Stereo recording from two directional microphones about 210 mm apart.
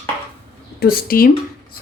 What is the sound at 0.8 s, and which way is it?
Speech, 45° left (ahead or behind).